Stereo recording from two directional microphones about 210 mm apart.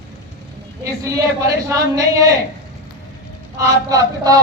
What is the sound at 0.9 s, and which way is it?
Speech, 15° right (ahead or behind).